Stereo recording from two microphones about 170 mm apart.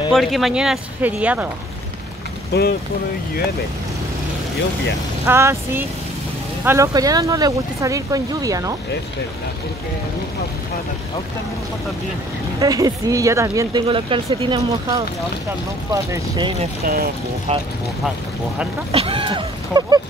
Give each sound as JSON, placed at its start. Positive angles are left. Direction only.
{"t": 0.1, "sound": "speech", "side_deg": 0}
{"t": 2.5, "sound": "speech", "side_deg": 75}
{"t": 5.2, "sound": "speech", "side_deg": -15}
{"t": 12.5, "sound": "speech", "side_deg": -20}
{"t": 13.8, "sound": "speech", "side_deg": -30}
{"t": 16.8, "sound": "speech", "side_deg": -60}
{"t": 17.5, "sound": "speech", "side_deg": -40}
{"t": 18.9, "sound": "speech", "side_deg": -35}